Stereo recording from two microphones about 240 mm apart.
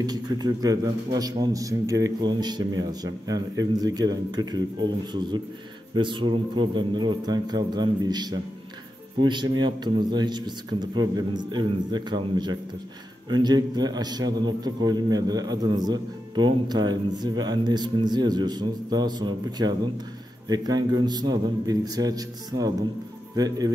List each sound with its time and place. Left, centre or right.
0.0 s a man's voice: centre